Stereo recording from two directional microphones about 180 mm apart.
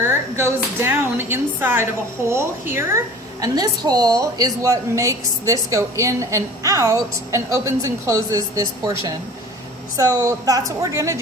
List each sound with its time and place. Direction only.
0.0 s a woman's voice: 15° right (ahead or behind)
10.0 s a woman's voice: 20° right (ahead or behind)